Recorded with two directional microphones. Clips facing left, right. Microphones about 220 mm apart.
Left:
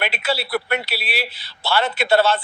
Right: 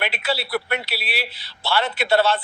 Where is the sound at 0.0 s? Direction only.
45° left (ahead or behind).